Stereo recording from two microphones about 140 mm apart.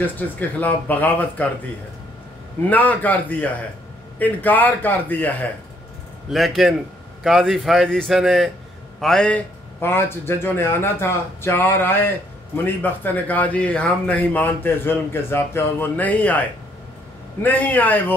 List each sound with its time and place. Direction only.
0.0 s a man's voice: 10° left (ahead or behind)
2.7 s a man's voice: 10° left (ahead or behind)
6.3 s a man's voice: centre (ahead or behind)